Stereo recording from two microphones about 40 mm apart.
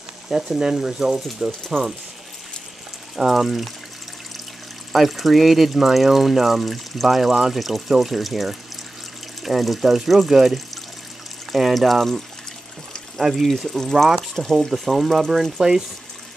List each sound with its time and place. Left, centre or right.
0.6 s speech: centre
3.2 s speech: centre
4.9 s speech: centre
13.2 s speech: centre